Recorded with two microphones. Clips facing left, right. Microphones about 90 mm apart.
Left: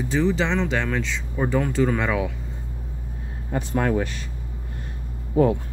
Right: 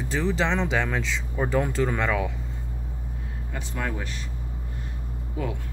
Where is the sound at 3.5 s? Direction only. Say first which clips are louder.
Left 9 dB; 50° left (ahead or behind).